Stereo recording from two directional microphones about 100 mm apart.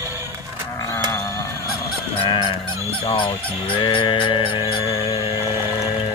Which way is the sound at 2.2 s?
50° left (ahead or behind).